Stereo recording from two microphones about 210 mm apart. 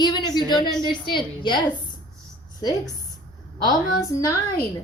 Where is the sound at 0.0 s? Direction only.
20° left (ahead or behind).